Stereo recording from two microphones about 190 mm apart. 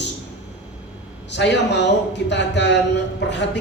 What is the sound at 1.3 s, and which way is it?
A man's voice, 65° left (ahead or behind).